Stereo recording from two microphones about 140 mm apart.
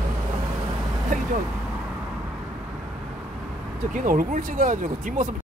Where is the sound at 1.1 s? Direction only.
75° right (ahead or behind).